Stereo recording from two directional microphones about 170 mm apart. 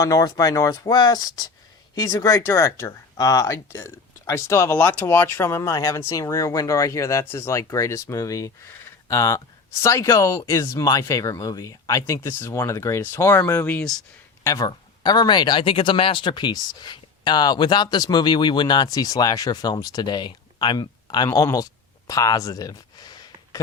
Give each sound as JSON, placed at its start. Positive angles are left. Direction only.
{"t": 0.0, "sound": "speech", "side_deg": 20}
{"t": 14.4, "sound": "speech", "side_deg": 20}